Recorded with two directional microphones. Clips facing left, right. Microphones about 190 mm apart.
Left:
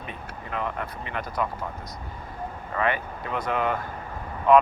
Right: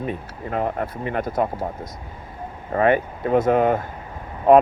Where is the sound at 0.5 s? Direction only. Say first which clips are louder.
Right 7 dB; 45° right (ahead or behind).